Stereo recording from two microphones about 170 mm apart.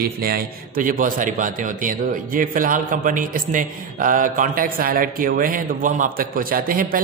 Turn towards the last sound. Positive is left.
turn(degrees=-55)  # may be behind; listen again after turning